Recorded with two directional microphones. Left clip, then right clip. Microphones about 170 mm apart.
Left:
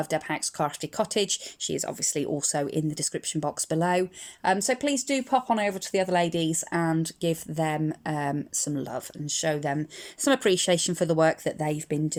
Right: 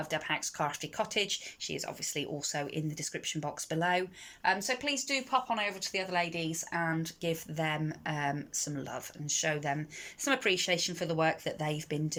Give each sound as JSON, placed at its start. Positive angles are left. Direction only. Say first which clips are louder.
{"t": 0.0, "sound": "speech", "louder": "left 5 dB", "side_deg": 30}